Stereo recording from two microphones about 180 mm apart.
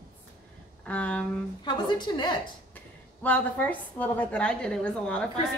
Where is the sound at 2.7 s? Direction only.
10° left (ahead or behind).